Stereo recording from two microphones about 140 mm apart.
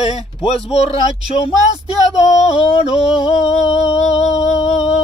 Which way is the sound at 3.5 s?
55° left (ahead or behind).